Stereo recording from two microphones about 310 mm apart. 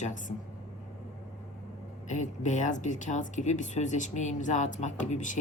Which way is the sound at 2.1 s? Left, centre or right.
Left.